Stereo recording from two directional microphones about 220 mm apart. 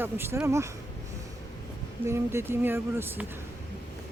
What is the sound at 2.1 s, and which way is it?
Speech, 10° right (ahead or behind).